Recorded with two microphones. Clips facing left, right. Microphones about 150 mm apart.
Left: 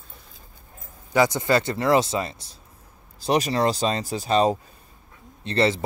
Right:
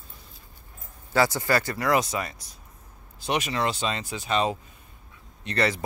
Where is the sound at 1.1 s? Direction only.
20° left (ahead or behind).